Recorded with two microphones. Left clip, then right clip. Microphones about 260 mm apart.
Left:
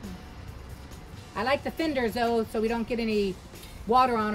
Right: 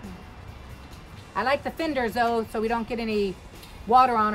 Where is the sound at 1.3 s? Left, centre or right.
Right.